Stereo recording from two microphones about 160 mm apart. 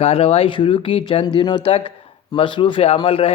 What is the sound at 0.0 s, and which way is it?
A man's voice, 40° left (ahead or behind).